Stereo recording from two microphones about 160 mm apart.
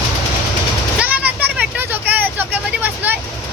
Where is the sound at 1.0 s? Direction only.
10° right (ahead or behind).